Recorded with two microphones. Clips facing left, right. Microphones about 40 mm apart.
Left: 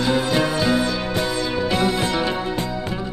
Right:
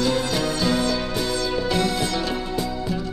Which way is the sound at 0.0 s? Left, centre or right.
Left.